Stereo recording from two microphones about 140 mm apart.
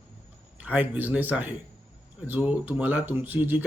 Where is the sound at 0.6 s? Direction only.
10° right (ahead or behind).